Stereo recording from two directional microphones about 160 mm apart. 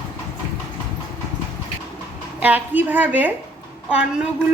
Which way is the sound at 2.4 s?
10° right (ahead or behind).